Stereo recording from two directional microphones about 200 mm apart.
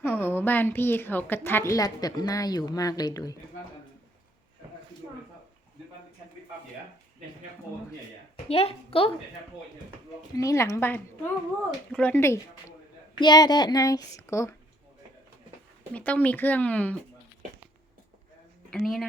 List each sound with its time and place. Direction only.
0.0 s a woman's voice: 10° left (ahead or behind)
8.4 s speech: 30° left (ahead or behind)
10.3 s a woman's voice: 15° left (ahead or behind)
15.9 s a woman's voice: 10° left (ahead or behind)
18.7 s speech: centre (ahead or behind)